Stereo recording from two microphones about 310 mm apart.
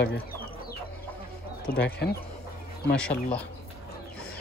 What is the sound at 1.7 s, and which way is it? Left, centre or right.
Speech, left.